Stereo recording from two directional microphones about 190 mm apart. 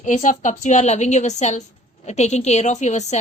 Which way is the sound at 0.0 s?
40° left (ahead or behind).